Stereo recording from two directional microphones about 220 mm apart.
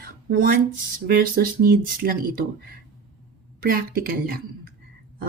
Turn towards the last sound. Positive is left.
turn(degrees=-40)  # may be behind; listen again after turning